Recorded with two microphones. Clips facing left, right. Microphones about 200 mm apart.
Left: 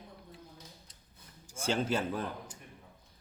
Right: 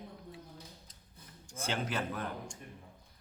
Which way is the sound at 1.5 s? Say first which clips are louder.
Left 5 dB; 30° left (ahead or behind).